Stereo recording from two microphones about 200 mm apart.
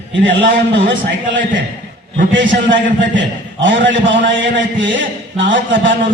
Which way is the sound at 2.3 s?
65° right (ahead or behind).